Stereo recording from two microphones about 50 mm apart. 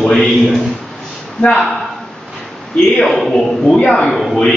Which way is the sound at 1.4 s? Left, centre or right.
Centre.